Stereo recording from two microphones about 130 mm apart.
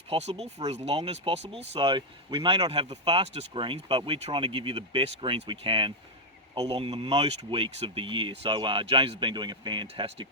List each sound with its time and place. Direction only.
0.1 s speech: 55° right (ahead or behind); by 10.2 s 40° right (ahead or behind)